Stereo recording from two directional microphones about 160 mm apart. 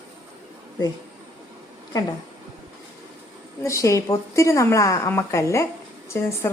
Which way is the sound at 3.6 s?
20° left (ahead or behind).